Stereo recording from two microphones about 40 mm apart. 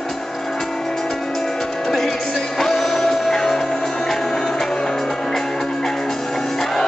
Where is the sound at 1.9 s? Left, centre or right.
Centre.